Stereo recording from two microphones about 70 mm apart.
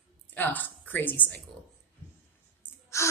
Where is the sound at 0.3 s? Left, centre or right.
Left.